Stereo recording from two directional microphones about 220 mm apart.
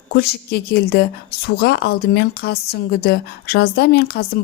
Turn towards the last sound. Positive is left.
turn(degrees=45)  # may be behind; listen again after turning